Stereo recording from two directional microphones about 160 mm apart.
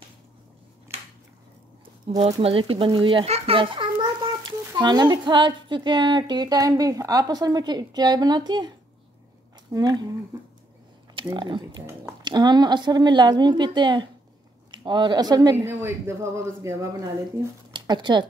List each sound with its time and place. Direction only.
2.0 s a child's voice: 40° right (ahead or behind); by 10.0 s 25° right (ahead or behind)
11.1 s a child's voice: 30° right (ahead or behind)
17.7 s speech: 30° right (ahead or behind)